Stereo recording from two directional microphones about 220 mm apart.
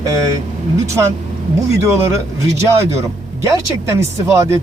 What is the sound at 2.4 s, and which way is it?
Speech, 30° right (ahead or behind).